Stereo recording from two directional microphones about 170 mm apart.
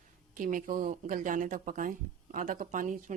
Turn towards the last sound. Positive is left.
turn(degrees=-50)  # may be behind; listen again after turning